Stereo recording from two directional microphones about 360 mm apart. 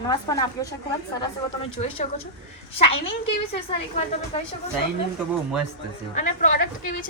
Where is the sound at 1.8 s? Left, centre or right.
Centre.